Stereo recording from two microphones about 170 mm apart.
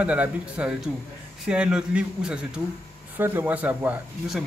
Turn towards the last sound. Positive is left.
turn(degrees=-10)  # may be behind; listen again after turning